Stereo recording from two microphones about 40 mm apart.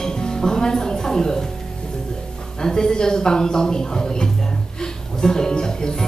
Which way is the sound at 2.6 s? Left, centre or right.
Centre.